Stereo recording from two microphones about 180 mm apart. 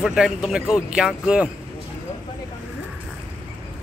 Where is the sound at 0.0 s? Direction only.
5° right (ahead or behind).